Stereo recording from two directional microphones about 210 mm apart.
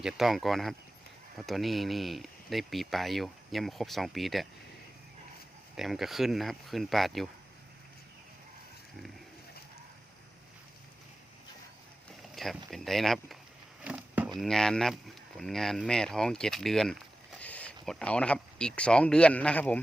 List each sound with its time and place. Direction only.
0.0 s speech: centre (ahead or behind)
5.7 s speech: centre (ahead or behind)
12.3 s a sound: centre (ahead or behind)
12.7 s speech: centre (ahead or behind)
13.8 s a sound: 5° right (ahead or behind)
15.4 s speech: centre (ahead or behind)